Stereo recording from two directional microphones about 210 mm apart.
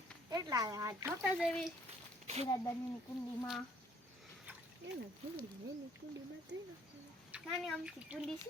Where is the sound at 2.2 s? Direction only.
30° right (ahead or behind).